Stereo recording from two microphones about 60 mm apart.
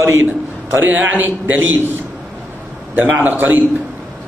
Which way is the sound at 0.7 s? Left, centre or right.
Right.